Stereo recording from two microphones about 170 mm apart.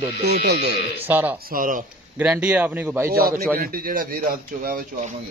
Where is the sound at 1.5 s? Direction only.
55° right (ahead or behind).